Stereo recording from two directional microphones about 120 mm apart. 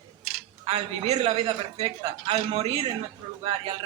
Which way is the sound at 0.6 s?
50° right (ahead or behind).